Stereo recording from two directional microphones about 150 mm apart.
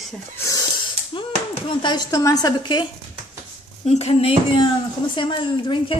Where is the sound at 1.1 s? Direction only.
35° left (ahead or behind).